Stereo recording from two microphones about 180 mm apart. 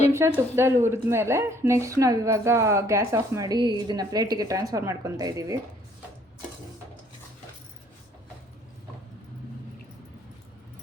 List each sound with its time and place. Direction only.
0.5 s a woman's voice: 15° right (ahead or behind)